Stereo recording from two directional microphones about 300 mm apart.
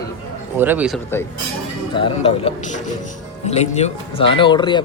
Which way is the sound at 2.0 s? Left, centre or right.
Centre.